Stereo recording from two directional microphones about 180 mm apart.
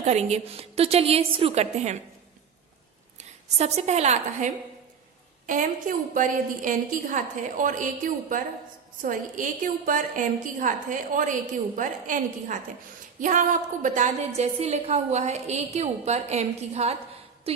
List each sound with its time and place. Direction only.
0.0 s a woman's voice: 40° right (ahead or behind)
3.2 s a woman's voice: 40° right (ahead or behind)